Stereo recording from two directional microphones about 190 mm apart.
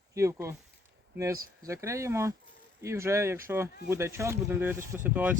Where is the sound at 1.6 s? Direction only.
15° right (ahead or behind).